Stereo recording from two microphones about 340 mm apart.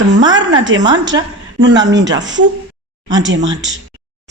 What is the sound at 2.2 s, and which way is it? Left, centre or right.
Speech, right.